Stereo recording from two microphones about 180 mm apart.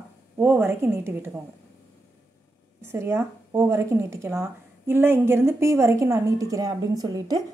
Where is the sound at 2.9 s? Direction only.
15° right (ahead or behind).